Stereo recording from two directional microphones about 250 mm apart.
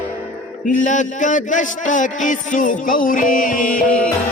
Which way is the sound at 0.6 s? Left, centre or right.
Left.